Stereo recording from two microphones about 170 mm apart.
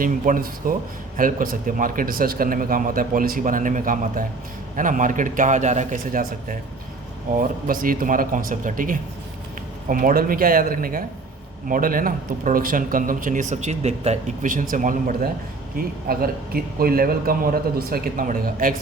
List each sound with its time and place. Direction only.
0.0 s a man's voice: 55° right (ahead or behind)